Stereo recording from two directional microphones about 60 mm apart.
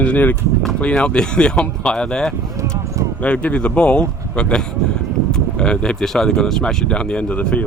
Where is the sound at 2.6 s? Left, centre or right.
Right.